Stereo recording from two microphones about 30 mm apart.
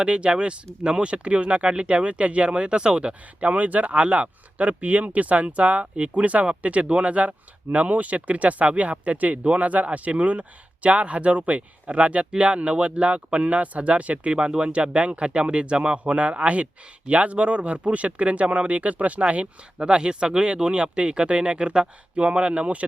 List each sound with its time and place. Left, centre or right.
0.0 s speech: right
14.3 s speech: right
19.8 s speech: right